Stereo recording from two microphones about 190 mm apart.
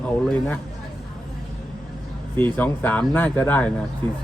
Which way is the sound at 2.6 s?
10° left (ahead or behind).